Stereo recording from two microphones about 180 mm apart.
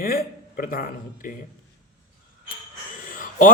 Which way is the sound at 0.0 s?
55° left (ahead or behind).